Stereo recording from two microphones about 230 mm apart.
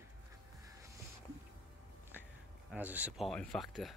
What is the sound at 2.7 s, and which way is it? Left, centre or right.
Speech, centre.